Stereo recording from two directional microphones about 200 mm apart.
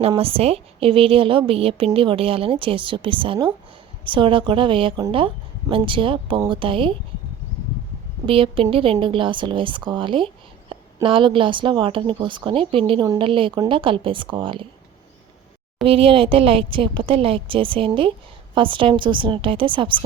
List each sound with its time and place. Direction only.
0.0 s a woman's voice: 30° right (ahead or behind)
8.3 s a woman's voice: 25° right (ahead or behind)
15.8 s a woman's voice: 25° right (ahead or behind)